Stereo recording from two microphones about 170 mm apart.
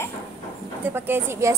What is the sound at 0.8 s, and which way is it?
Speech, 10° right (ahead or behind).